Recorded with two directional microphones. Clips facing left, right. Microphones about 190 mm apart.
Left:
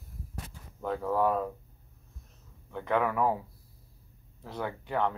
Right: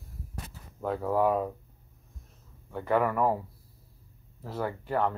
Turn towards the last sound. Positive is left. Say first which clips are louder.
# right 2 dB
turn(degrees=-5)  # may be behind; listen again after turning